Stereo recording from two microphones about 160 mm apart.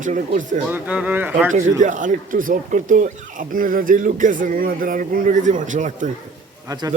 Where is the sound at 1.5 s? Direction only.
50° right (ahead or behind).